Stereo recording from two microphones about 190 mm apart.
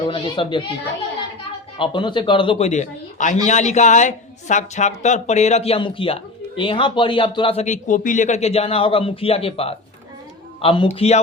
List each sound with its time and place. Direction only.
0.0 s speech: 25° left (ahead or behind)
1.8 s speech: 25° left (ahead or behind)